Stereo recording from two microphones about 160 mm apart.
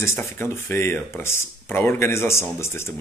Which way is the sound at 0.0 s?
15° left (ahead or behind).